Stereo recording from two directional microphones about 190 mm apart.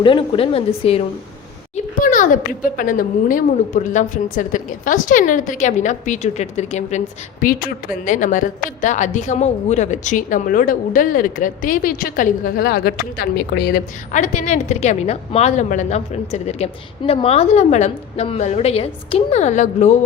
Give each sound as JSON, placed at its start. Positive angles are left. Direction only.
{"t": 0.0, "sound": "a woman's voice", "side_deg": 25}
{"t": 1.7, "sound": "speech", "side_deg": 40}
{"t": 14.1, "sound": "a woman's voice", "side_deg": 40}